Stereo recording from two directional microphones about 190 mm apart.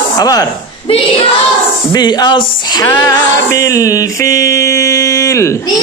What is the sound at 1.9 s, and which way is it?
Music, 20° left (ahead or behind).